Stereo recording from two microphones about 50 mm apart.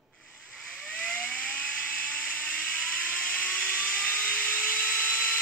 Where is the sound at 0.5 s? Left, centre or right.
Centre.